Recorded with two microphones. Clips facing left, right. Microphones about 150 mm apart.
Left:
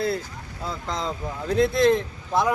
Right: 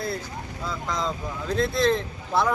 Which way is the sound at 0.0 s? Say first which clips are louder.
Left 5 dB; 65° left (ahead or behind).